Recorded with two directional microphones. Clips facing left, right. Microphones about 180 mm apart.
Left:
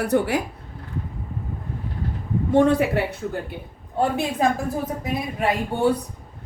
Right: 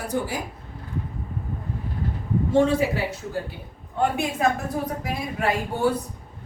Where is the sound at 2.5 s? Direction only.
60° left (ahead or behind).